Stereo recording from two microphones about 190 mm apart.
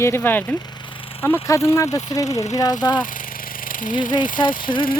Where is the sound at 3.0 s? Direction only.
45° left (ahead or behind).